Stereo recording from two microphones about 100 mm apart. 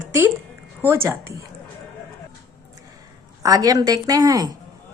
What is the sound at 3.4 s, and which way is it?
Speech, 40° right (ahead or behind).